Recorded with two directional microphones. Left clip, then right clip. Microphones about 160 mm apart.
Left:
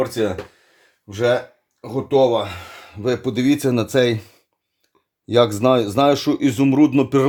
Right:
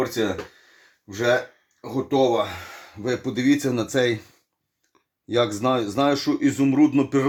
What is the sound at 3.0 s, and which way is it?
Speech, 50° left (ahead or behind).